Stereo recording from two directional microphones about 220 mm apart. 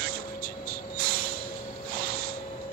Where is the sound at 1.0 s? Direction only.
40° right (ahead or behind).